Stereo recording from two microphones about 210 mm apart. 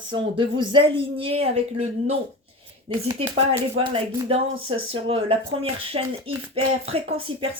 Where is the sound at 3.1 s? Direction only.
25° right (ahead or behind).